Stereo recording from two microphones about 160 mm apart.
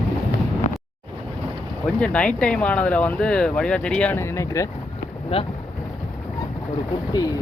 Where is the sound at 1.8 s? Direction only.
10° left (ahead or behind).